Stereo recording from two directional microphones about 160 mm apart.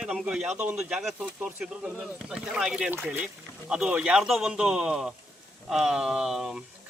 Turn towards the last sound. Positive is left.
turn(degrees=-5)  # may be behind; listen again after turning